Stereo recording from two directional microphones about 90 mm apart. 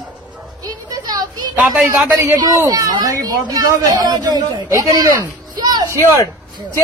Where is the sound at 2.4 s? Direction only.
45° right (ahead or behind).